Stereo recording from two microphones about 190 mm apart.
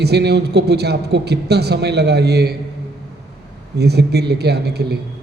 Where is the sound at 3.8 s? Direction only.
60° right (ahead or behind).